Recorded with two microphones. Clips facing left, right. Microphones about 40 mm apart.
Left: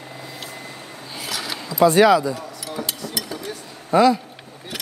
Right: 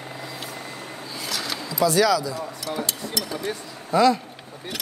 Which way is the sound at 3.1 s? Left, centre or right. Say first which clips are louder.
Right 2 dB; centre.